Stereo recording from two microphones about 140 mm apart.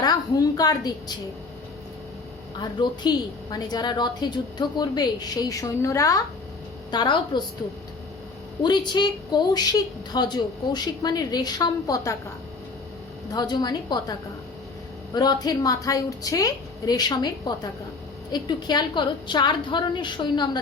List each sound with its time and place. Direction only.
0.0 s a woman's voice: 25° left (ahead or behind)
2.6 s a woman's voice: 30° left (ahead or behind)
8.6 s a woman's voice: 30° left (ahead or behind)
13.3 s a woman's voice: 30° left (ahead or behind)
15.1 s a woman's voice: 30° left (ahead or behind)